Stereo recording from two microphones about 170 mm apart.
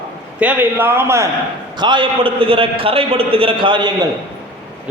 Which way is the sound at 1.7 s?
25° right (ahead or behind).